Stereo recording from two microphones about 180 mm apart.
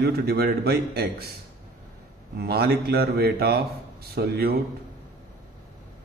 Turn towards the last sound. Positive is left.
turn(degrees=-60)  # may be behind; listen again after turning